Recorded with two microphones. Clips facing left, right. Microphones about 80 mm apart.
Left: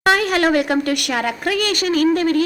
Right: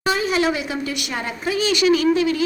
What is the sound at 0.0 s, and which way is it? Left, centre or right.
Speech, left.